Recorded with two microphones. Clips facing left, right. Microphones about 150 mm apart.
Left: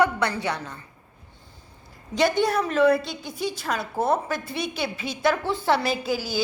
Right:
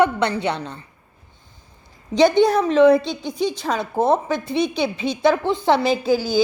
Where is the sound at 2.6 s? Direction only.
20° right (ahead or behind).